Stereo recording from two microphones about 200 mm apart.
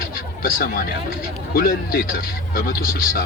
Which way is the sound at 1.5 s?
45° left (ahead or behind).